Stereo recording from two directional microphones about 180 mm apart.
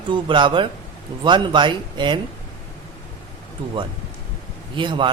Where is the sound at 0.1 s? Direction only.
25° right (ahead or behind).